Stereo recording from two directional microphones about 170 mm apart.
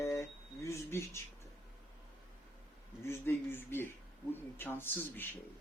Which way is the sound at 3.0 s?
15° left (ahead or behind).